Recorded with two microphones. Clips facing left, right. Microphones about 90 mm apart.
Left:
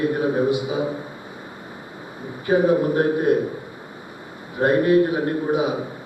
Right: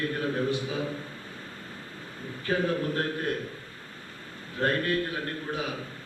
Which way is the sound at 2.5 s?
15° left (ahead or behind).